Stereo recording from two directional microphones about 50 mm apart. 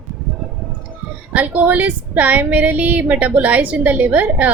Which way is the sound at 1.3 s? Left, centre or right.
Right.